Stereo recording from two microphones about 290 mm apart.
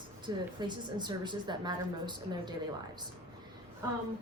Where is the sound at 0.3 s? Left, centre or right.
Centre.